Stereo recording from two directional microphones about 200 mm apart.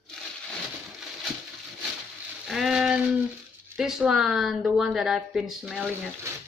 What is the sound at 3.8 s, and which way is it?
A woman's voice, 5° right (ahead or behind).